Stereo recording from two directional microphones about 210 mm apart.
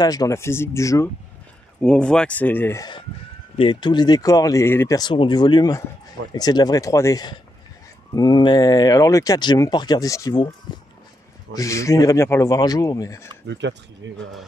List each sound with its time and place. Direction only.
0.0 s speech: 15° left (ahead or behind)
11.5 s speech: 15° left (ahead or behind)
13.5 s speech: 60° right (ahead or behind)